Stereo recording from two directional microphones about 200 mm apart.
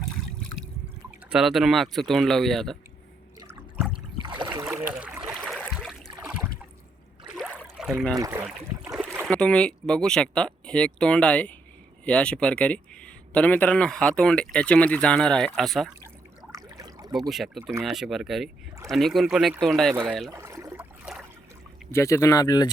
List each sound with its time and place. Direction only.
1.3 s speech: centre (ahead or behind)
3.4 s water: 5° right (ahead or behind)
4.2 s boat: 20° right (ahead or behind)
4.6 s a sound: 5° right (ahead or behind)
7.3 s a sound: 5° right (ahead or behind)
8.1 s speech: 15° right (ahead or behind)
8.8 s boat: 10° right (ahead or behind)
9.2 s speech: 5° left (ahead or behind)
16.6 s a sound: 20° right (ahead or behind)
17.2 s speech: centre (ahead or behind)
20.3 s a sound: 15° right (ahead or behind)
21.9 s speech: 15° left (ahead or behind)